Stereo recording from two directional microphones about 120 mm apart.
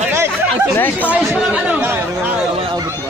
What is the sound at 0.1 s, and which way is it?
Chatter, 20° right (ahead or behind).